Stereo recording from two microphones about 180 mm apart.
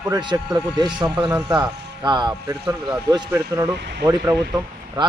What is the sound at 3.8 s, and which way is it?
Speech, 70° right (ahead or behind).